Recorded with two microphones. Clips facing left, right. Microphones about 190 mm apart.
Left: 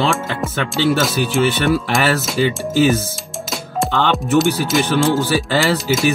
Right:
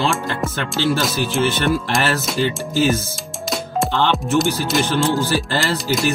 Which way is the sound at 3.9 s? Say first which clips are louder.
Left 3 dB; 50° left (ahead or behind).